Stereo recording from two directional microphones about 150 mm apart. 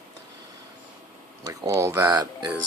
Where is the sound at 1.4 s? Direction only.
20° right (ahead or behind).